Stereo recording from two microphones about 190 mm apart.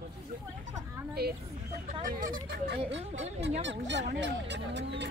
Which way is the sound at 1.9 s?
45° right (ahead or behind).